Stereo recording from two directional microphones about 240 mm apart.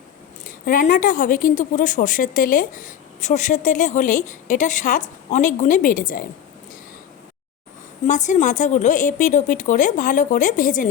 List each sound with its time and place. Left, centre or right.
0.4 s speech: left
8.0 s speech: left